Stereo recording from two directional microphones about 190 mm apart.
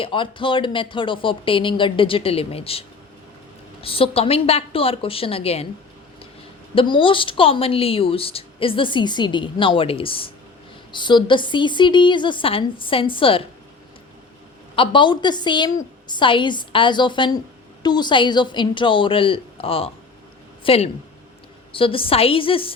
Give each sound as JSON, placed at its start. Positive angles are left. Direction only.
{"t": 0.0, "sound": "a woman's voice", "side_deg": 25}
{"t": 6.7, "sound": "speech", "side_deg": 25}
{"t": 14.8, "sound": "a woman's voice", "side_deg": 25}